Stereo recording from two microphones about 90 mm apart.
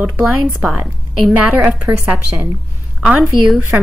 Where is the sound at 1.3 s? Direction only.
15° right (ahead or behind).